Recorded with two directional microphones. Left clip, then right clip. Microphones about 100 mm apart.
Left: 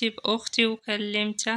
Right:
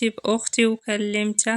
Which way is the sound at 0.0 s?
40° right (ahead or behind).